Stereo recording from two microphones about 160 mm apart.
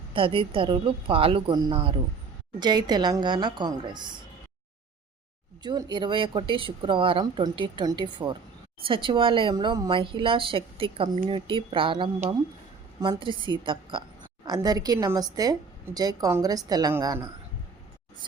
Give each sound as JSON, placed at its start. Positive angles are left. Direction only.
{"t": 0.1, "sound": "a woman's voice", "side_deg": -35}
{"t": 5.6, "sound": "a woman's voice", "side_deg": -30}